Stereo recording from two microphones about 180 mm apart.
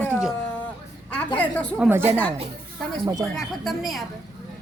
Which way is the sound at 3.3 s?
Centre (ahead or behind).